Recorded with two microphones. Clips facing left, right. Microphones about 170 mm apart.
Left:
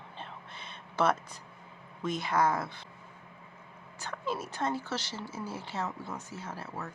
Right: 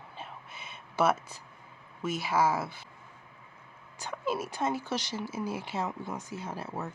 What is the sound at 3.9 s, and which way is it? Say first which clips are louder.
Speech: right 3 dB; 15° right (ahead or behind).